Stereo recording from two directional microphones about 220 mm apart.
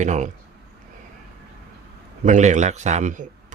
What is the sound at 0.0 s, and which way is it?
Speech, 35° right (ahead or behind).